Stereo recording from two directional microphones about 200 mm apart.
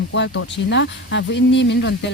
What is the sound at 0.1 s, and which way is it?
Speech, 70° left (ahead or behind).